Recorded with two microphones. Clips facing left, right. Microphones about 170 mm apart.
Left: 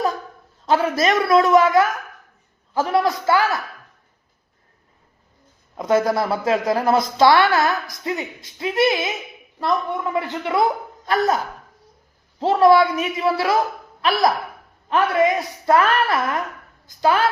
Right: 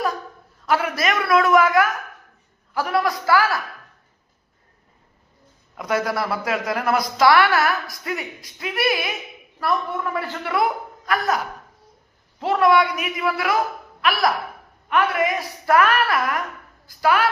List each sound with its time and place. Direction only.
0.6 s speech: 25° left (ahead or behind)
5.7 s speech: 25° left (ahead or behind)
12.4 s a woman's voice: 30° left (ahead or behind)